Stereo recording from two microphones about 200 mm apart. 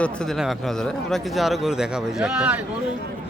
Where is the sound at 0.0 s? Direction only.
5° left (ahead or behind).